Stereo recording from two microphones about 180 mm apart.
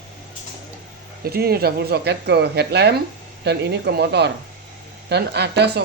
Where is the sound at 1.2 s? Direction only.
60° right (ahead or behind).